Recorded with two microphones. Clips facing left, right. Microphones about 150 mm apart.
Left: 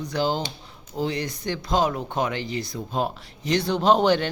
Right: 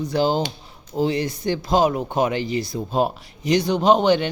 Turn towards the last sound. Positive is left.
turn(degrees=0)  # may be behind; listen again after turning